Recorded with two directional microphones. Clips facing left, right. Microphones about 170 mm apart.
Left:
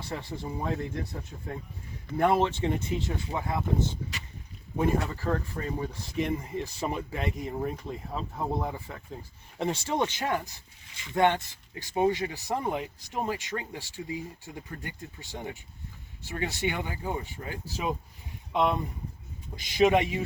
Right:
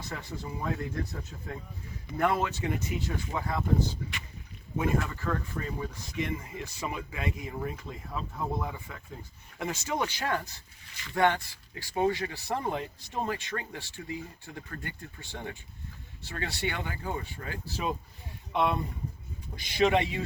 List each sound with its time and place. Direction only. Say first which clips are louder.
0.1 s speech: left 4 dB; 30° left (ahead or behind)
2.1 s speech: left 4 dB; 25° left (ahead or behind)
4.8 s speech: left 3 dB; 35° left (ahead or behind); by 20.2 s 20° left (ahead or behind)